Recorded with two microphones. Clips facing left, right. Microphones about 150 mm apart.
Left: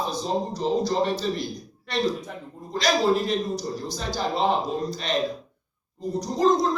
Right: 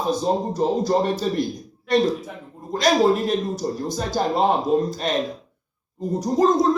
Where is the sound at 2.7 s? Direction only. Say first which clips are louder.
Right 4 dB; 50° right (ahead or behind).